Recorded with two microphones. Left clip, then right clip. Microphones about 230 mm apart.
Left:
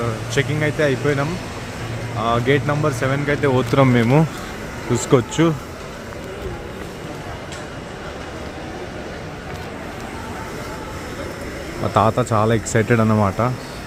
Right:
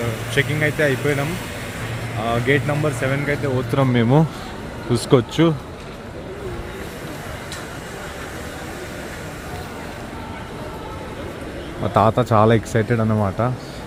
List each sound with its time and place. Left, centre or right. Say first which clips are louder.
0.3 s speech: right 1 dB; centre
3.4 s speech: left 5 dB; left
3.9 s speech: left 1 dB; centre
11.9 s speech: right 1 dB; centre
12.8 s speech: left 3 dB; centre